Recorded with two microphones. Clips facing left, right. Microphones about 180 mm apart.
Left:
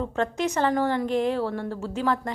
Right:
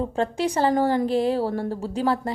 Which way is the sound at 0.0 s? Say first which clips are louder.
Right 2 dB; 30° right (ahead or behind).